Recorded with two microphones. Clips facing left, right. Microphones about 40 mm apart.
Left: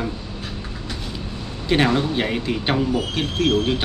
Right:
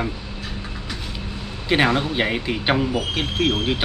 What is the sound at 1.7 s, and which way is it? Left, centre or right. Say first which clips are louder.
A man's voice: even; centre.